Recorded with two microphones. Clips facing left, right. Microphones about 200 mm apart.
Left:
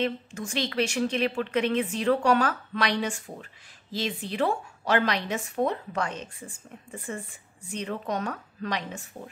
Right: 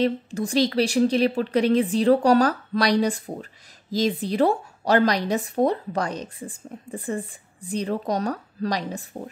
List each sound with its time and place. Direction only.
0.0 s speech: 35° right (ahead or behind)